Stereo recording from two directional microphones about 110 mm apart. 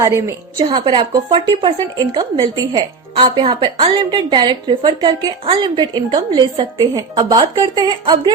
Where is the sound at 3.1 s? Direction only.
50° right (ahead or behind).